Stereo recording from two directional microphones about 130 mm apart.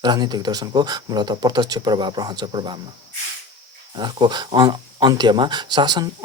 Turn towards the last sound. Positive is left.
turn(degrees=-30)  # may be behind; listen again after turning